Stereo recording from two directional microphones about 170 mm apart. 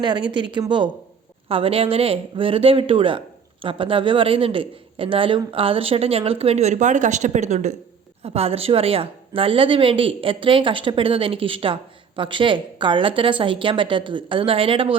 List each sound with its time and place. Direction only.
0.0 s a woman's voice: 25° right (ahead or behind)